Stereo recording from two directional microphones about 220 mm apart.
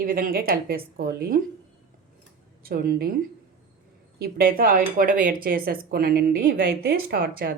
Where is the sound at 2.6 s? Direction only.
40° right (ahead or behind).